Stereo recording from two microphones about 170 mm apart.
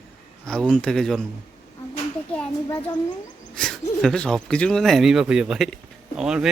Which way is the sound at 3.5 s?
5° left (ahead or behind).